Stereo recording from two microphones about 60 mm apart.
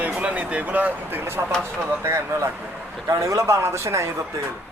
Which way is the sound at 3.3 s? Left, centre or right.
Right.